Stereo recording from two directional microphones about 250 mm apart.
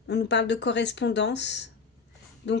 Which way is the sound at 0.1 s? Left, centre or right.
Left.